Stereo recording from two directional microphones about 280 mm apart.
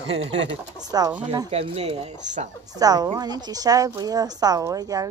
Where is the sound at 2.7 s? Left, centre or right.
Centre.